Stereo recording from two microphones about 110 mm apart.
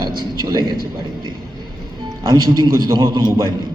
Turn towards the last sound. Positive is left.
turn(degrees=-45)  # may be behind; listen again after turning